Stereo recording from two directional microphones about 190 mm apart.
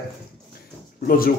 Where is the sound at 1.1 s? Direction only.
50° left (ahead or behind).